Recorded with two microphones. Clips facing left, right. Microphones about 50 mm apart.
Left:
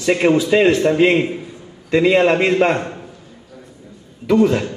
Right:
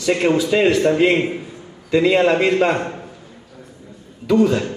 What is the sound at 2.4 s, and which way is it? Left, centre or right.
Speech, left.